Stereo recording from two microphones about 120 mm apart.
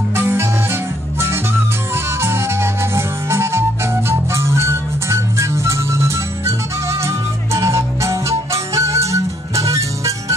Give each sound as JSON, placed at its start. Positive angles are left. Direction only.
{"t": 0.1, "sound": "music", "side_deg": -20}
{"t": 2.1, "sound": "music", "side_deg": -20}